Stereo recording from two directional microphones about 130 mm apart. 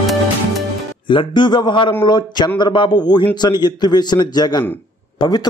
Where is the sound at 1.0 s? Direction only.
35° left (ahead or behind).